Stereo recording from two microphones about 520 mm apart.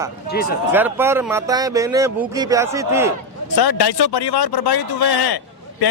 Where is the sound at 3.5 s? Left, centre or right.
Left.